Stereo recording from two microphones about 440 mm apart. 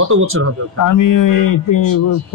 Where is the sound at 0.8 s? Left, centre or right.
Left.